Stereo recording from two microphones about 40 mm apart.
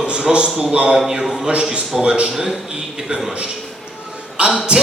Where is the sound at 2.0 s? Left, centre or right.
Right.